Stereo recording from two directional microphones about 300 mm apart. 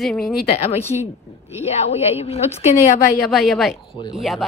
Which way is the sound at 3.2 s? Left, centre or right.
Centre.